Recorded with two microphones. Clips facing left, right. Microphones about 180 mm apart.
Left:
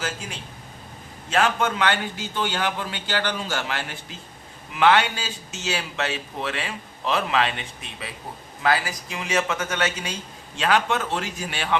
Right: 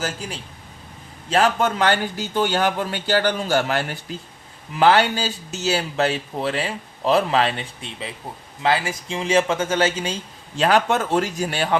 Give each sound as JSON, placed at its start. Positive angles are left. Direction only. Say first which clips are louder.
{"t": 1.3, "sound": "a man's voice", "louder": "right 3 dB", "side_deg": -35}
{"t": 10.6, "sound": "a man's voice", "louder": "right 4 dB", "side_deg": -40}